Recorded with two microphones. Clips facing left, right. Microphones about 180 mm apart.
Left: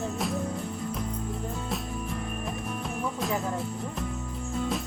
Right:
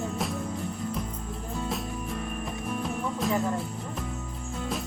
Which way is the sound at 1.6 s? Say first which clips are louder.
Right 1 dB; centre (ahead or behind).